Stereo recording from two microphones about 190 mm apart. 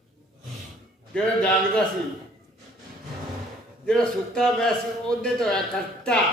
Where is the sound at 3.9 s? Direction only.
5° left (ahead or behind).